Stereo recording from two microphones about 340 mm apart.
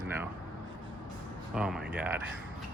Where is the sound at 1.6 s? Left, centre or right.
Centre.